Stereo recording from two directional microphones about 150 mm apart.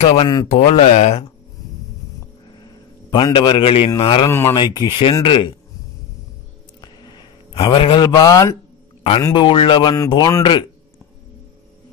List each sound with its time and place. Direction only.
0.0 s speech: 40° left (ahead or behind)
2.6 s a sound: 30° left (ahead or behind)
4.0 s speech: 35° left (ahead or behind)
4.3 s speech: 15° left (ahead or behind)
4.6 s speech: 30° left (ahead or behind)
6.8 s a sound: 30° left (ahead or behind)
9.2 s speech: 30° left (ahead or behind)